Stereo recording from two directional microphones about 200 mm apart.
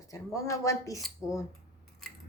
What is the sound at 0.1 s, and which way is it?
Speech, 15° left (ahead or behind).